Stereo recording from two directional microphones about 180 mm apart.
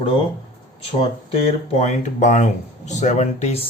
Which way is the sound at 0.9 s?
35° left (ahead or behind).